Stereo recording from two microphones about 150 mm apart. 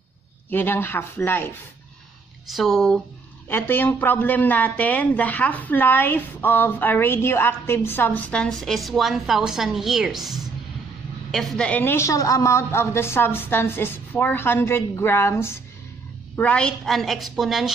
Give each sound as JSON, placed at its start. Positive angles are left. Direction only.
{"t": 0.5, "sound": "speech", "side_deg": 15}
{"t": 2.5, "sound": "a woman's voice", "side_deg": 0}
{"t": 3.4, "sound": "a woman's voice", "side_deg": 15}